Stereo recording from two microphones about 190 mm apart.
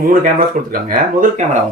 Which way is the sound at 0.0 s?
45° right (ahead or behind).